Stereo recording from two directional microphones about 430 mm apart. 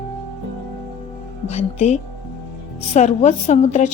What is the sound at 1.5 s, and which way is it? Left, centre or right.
A woman's voice, centre.